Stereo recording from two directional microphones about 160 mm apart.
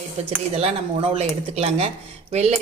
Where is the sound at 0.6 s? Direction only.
40° right (ahead or behind).